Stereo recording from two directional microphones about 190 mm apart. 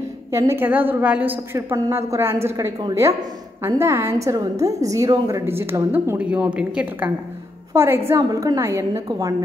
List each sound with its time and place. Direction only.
0.3 s a woman's voice: 15° right (ahead or behind)